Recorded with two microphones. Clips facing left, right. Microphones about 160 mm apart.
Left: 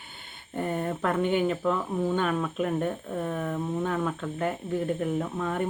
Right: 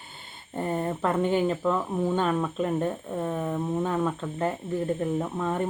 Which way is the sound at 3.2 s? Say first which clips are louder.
Right 2 dB; 15° right (ahead or behind).